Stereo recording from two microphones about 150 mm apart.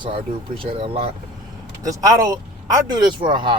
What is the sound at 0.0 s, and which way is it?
Speech, 35° right (ahead or behind).